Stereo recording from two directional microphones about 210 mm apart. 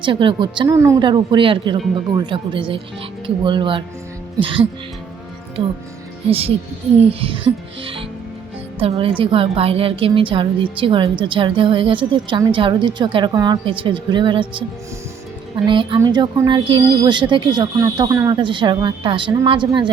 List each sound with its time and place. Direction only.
0.0 s a woman's voice: 25° right (ahead or behind)
6.2 s a woman's voice: 25° right (ahead or behind)
15.6 s a woman's voice: 25° right (ahead or behind)